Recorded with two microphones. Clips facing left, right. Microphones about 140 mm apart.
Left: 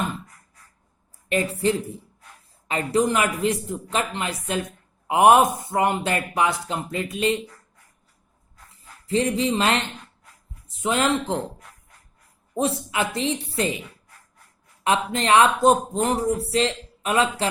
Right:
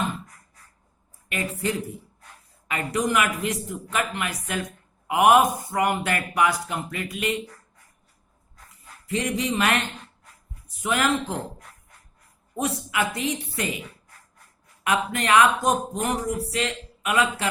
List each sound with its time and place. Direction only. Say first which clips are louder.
1.3 s a man's voice: left 5 dB; 30° left (ahead or behind)
9.0 s a man's voice: left 4 dB; 30° left (ahead or behind)
12.5 s a man's voice: left 2 dB; 25° left (ahead or behind)
14.8 s a man's voice: left 2 dB; 25° left (ahead or behind)